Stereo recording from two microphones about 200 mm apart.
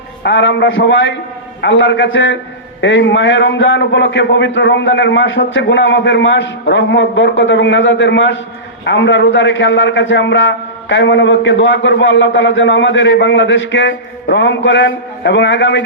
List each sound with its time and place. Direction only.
0.2 s a man's voice: 65° left (ahead or behind)